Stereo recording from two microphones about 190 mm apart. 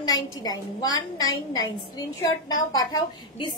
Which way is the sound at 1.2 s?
90° left.